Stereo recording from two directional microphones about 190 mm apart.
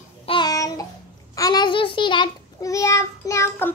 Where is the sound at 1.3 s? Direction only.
20° left (ahead or behind).